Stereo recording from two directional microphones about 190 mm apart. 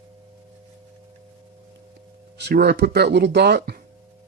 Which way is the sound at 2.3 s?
60° right (ahead or behind).